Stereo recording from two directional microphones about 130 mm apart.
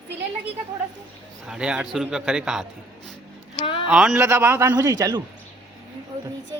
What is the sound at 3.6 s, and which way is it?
Speech, 40° left (ahead or behind).